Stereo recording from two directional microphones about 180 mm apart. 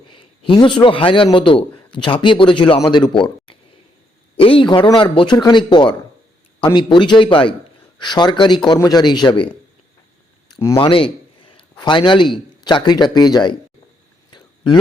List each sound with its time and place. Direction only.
0.1 s a man's voice: 25° left (ahead or behind)
10.5 s speech: 15° left (ahead or behind)
10.8 s a man's voice: 30° left (ahead or behind)
14.3 s whispering: 25° left (ahead or behind)